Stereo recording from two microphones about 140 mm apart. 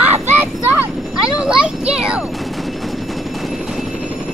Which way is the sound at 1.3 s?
5° right (ahead or behind).